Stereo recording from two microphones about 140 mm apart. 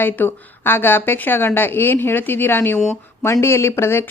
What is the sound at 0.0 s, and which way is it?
A woman's voice, 15° left (ahead or behind).